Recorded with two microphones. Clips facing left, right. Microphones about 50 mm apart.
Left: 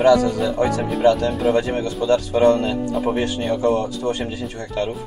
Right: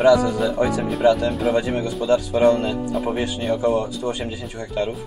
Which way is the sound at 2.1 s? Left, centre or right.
Left.